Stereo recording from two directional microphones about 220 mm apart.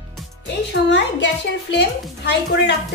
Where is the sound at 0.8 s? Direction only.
50° left (ahead or behind).